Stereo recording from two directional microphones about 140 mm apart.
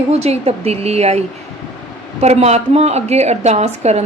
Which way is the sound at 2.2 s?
50° right (ahead or behind).